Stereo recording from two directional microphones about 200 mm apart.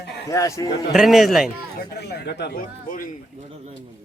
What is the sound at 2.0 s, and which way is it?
A man's voice, 55° left (ahead or behind).